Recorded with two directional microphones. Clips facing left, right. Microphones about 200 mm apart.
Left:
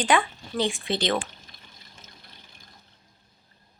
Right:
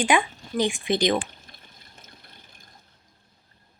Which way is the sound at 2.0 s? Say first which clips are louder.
Right 2 dB; 55° right (ahead or behind).